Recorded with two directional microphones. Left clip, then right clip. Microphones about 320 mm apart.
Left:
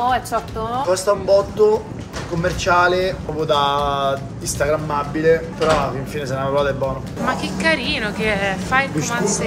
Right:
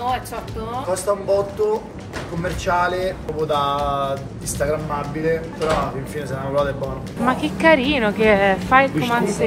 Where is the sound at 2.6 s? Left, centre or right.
Centre.